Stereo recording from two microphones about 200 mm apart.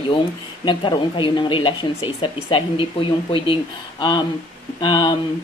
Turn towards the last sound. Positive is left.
turn(degrees=20)  # may be behind; listen again after turning